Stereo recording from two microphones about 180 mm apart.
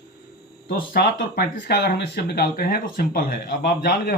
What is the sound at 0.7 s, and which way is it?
Speech, 60° left (ahead or behind).